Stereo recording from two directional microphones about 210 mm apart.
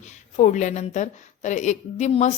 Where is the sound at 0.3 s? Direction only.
35° left (ahead or behind).